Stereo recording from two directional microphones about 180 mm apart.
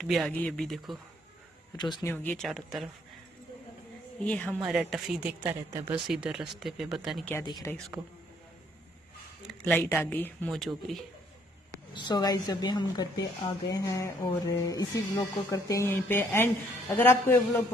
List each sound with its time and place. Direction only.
0.0 s speech: centre (ahead or behind)
1.8 s a woman's voice: 25° left (ahead or behind)
2.0 s speech: 10° left (ahead or behind)
4.2 s speech: 5° left (ahead or behind); by 5.9 s 15° right (ahead or behind)
6.0 s speech: 5° right (ahead or behind)
7.7 s speech: 10° left (ahead or behind)
9.5 s speech: 10° left (ahead or behind)
11.9 s a woman's voice: 25° left (ahead or behind)